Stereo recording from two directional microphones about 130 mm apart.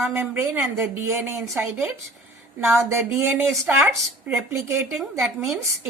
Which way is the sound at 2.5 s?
20° right (ahead or behind).